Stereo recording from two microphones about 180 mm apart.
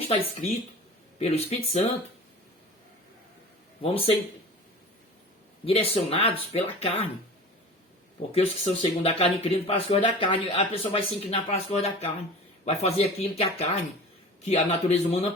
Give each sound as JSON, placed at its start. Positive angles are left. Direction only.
{"t": 1.2, "sound": "speech", "side_deg": 35}
{"t": 3.9, "sound": "speech", "side_deg": 30}
{"t": 5.6, "sound": "speech", "side_deg": 35}
{"t": 8.3, "sound": "speech", "side_deg": 30}